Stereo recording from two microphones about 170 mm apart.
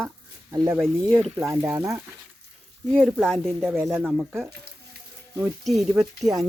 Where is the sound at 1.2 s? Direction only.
Centre (ahead or behind).